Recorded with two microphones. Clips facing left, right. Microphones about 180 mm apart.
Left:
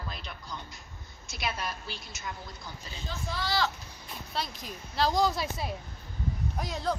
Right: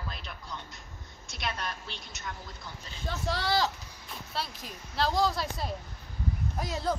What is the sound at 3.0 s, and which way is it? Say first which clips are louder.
Speech: right 4 dB; 70° right (ahead or behind).